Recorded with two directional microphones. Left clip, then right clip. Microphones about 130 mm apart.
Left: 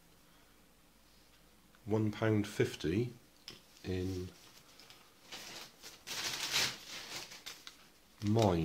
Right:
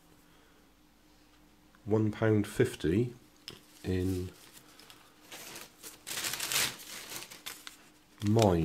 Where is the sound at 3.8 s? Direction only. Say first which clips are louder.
Right 5 dB; 40° right (ahead or behind).